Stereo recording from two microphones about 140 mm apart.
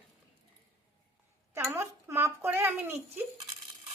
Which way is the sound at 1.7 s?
20° right (ahead or behind).